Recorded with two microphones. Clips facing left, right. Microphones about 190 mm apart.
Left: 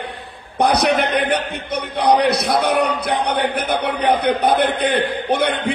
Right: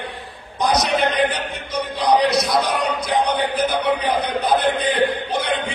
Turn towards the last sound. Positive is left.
turn(degrees=60)  # may be behind; listen again after turning